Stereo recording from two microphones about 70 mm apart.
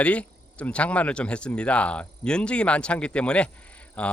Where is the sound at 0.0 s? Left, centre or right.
Centre.